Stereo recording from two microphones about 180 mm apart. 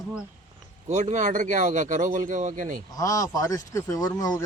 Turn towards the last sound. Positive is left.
turn(degrees=20)  # may be behind; listen again after turning